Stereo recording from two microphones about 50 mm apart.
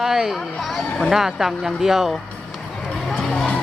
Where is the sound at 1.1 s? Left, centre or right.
Centre.